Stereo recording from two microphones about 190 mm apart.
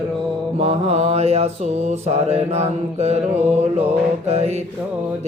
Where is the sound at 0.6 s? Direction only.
35° right (ahead or behind).